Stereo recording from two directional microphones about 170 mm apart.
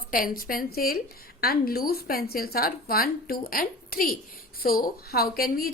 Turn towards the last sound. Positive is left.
turn(degrees=60)  # may be behind; listen again after turning